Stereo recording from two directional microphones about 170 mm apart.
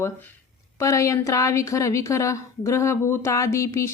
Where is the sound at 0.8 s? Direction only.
20° left (ahead or behind).